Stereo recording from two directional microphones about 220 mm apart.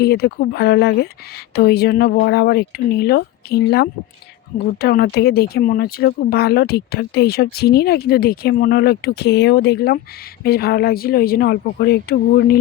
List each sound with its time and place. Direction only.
0.0 s speech: 45° left (ahead or behind)